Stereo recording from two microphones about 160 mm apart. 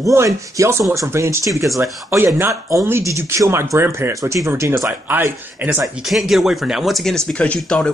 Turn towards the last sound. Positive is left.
turn(degrees=5)  # may be behind; listen again after turning